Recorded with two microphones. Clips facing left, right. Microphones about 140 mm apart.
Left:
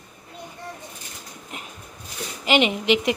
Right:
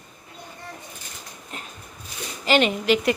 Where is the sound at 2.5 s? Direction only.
15° left (ahead or behind).